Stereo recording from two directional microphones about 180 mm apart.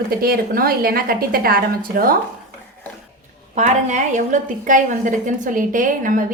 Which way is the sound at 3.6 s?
40° right (ahead or behind).